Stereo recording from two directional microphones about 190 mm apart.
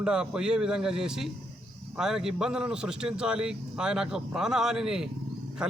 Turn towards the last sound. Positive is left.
turn(degrees=-5)  # may be behind; listen again after turning